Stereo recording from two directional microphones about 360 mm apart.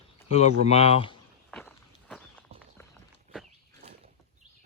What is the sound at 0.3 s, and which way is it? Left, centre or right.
Speech, centre.